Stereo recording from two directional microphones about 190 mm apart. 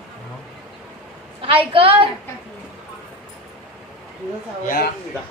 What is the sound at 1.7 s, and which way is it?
Speech, 30° right (ahead or behind).